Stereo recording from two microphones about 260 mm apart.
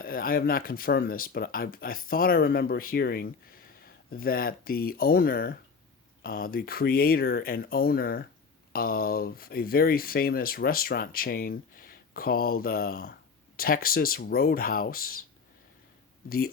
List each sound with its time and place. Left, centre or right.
0.0 s speech: left